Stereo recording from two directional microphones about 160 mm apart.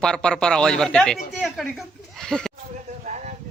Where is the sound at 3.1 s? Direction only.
50° right (ahead or behind).